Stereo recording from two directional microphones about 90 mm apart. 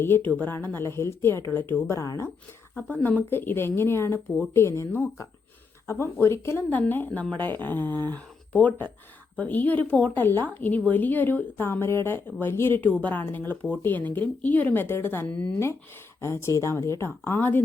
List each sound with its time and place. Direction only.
0.0 s a woman's voice: 20° left (ahead or behind)
2.0 s speech: 35° left (ahead or behind)
2.9 s a woman's voice: 20° left (ahead or behind)
16.2 s a woman's voice: 30° left (ahead or behind)